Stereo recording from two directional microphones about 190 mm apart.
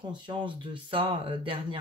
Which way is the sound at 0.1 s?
25° right (ahead or behind).